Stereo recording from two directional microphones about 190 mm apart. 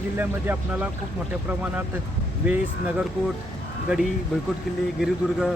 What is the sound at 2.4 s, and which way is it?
Speech, 5° right (ahead or behind).